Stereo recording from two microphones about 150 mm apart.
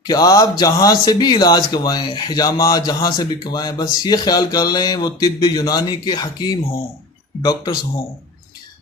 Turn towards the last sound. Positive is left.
turn(degrees=30)  # may be behind; listen again after turning